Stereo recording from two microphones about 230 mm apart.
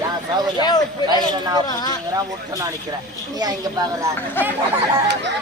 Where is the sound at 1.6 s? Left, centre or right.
Centre.